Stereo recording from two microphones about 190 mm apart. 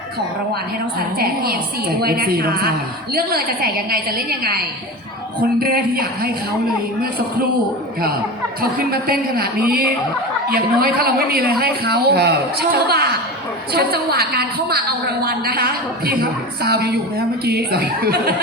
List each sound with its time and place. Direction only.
1.2 s a woman's voice: 55° right (ahead or behind)
8.9 s a woman's voice: 50° right (ahead or behind)